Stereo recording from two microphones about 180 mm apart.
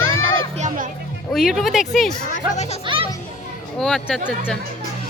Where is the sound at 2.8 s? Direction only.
30° right (ahead or behind).